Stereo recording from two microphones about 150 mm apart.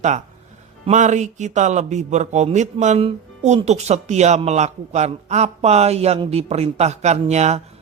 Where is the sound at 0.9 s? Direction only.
55° right (ahead or behind).